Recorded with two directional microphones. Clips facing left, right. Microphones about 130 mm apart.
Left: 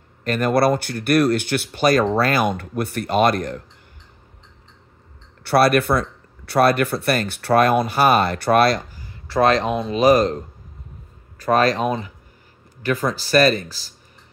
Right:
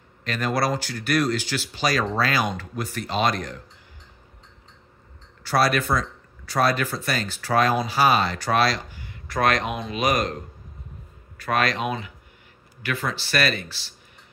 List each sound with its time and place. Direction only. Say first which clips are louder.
0.2 s speech: left 7 dB; 50° left (ahead or behind)
5.4 s speech: left 6 dB; 60° left (ahead or behind)
8.9 s speech: left 7 dB; 35° left (ahead or behind)